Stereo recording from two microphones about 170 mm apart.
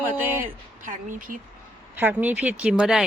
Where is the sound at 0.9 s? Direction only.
50° right (ahead or behind).